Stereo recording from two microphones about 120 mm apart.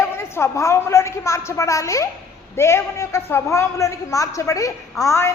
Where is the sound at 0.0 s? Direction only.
20° left (ahead or behind).